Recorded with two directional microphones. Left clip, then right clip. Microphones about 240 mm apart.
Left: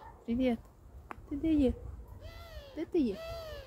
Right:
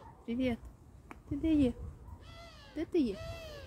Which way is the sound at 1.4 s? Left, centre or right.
Centre.